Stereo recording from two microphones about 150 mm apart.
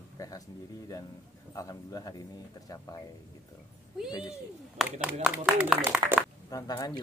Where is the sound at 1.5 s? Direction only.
20° left (ahead or behind).